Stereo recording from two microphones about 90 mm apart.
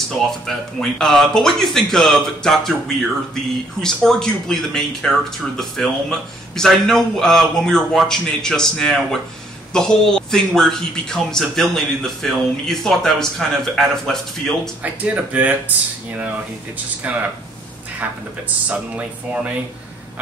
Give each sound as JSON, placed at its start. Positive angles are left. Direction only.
{"t": 0.5, "sound": "a man's voice", "side_deg": 5}
{"t": 3.8, "sound": "a man's voice", "side_deg": 5}
{"t": 14.8, "sound": "speech", "side_deg": -15}
{"t": 17.0, "sound": "speech", "side_deg": -15}